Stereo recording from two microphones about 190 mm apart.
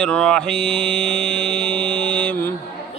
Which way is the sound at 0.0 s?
5° left (ahead or behind).